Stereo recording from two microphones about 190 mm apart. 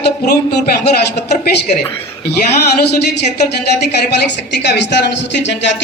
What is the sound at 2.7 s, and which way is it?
Speech, 60° left (ahead or behind).